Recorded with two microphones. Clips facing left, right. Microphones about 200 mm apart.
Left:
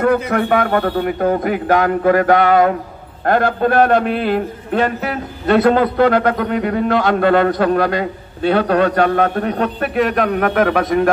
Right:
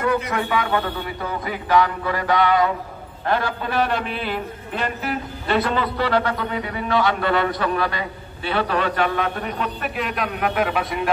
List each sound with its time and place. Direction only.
0.0 s a man's voice: 60° left (ahead or behind)